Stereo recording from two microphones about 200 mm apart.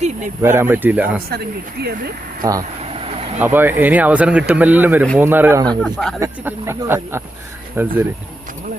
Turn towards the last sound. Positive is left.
turn(degrees=-10)  # may be behind; listen again after turning